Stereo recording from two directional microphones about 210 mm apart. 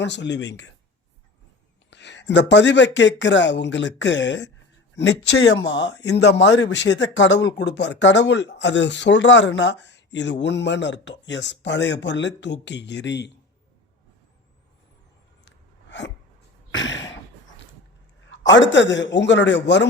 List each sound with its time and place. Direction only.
0.0 s speech: 55° left (ahead or behind)
1.9 s speech: 55° left (ahead or behind)
15.4 s a sound: 55° left (ahead or behind)
16.7 s speech: 60° left (ahead or behind)
18.3 s speech: 60° left (ahead or behind)